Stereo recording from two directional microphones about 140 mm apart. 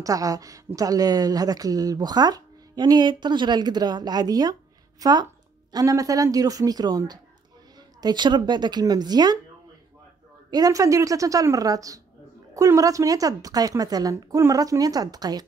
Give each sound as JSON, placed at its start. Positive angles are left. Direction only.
{"t": 0.0, "sound": "speech", "side_deg": -25}
{"t": 10.5, "sound": "speech", "side_deg": -25}